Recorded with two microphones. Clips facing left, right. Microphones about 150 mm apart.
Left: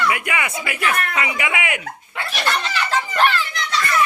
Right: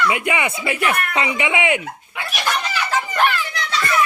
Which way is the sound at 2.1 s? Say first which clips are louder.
Even; 10° right (ahead or behind).